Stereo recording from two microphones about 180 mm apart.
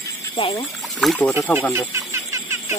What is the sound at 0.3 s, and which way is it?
Speech, 30° left (ahead or behind).